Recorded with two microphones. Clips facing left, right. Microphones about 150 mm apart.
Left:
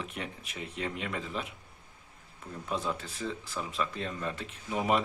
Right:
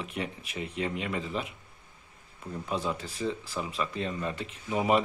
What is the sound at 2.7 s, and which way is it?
Speech, centre (ahead or behind).